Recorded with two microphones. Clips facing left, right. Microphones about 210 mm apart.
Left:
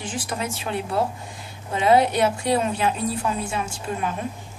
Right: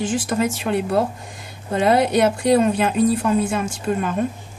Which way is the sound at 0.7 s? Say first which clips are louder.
Right 5 dB; 50° right (ahead or behind).